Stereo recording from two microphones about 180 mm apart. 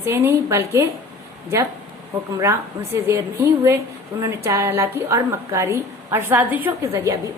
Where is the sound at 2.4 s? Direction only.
15° right (ahead or behind).